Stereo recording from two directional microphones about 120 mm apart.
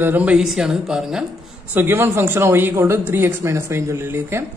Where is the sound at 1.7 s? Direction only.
15° right (ahead or behind).